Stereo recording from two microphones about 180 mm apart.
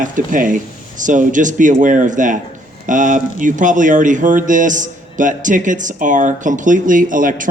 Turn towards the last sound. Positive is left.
turn(degrees=-50)  # may be behind; listen again after turning